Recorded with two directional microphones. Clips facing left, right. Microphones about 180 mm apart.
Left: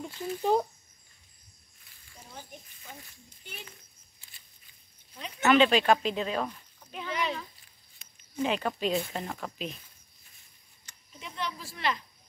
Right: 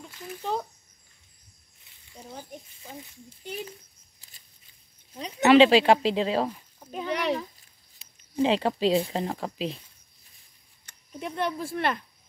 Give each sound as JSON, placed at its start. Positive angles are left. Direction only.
{"t": 0.1, "sound": "speech", "side_deg": 30}
{"t": 0.4, "sound": "speech", "side_deg": 15}
{"t": 2.8, "sound": "speech", "side_deg": -30}
{"t": 4.2, "sound": "a sound", "side_deg": -35}
{"t": 5.4, "sound": "speech", "side_deg": -30}
{"t": 6.8, "sound": "a sound", "side_deg": -40}
{"t": 7.1, "sound": "speech", "side_deg": -65}
{"t": 8.0, "sound": "speech", "side_deg": -30}
{"t": 10.9, "sound": "speech", "side_deg": -55}